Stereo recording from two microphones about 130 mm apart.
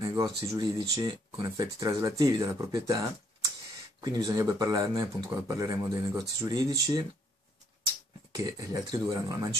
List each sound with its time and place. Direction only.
0.0 s speech: 25° right (ahead or behind)
8.5 s speech: 30° right (ahead or behind)